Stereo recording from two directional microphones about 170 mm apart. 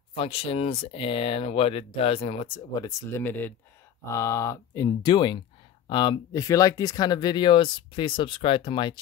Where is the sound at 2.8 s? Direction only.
15° left (ahead or behind).